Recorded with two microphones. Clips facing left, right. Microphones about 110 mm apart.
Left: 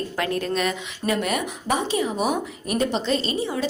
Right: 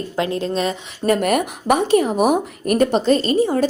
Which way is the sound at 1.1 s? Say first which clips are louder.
Right 7 dB; 50° right (ahead or behind).